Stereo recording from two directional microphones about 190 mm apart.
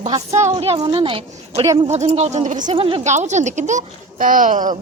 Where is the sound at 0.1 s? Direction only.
15° right (ahead or behind).